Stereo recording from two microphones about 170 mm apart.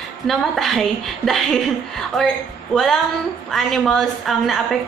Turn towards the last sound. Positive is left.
turn(degrees=0)  # may be behind; listen again after turning